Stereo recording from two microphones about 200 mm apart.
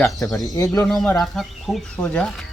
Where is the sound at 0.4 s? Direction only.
15° left (ahead or behind).